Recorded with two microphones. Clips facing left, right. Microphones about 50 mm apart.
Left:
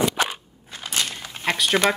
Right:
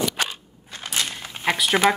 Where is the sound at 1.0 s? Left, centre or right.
Centre.